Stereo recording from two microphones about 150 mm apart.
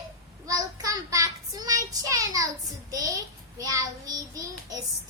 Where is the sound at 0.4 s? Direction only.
25° right (ahead or behind).